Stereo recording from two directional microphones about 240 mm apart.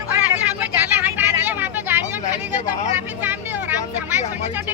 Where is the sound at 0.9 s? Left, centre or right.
Centre.